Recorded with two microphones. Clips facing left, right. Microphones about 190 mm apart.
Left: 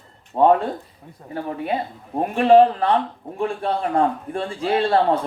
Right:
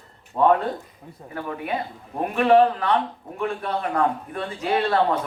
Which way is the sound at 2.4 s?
30° left (ahead or behind).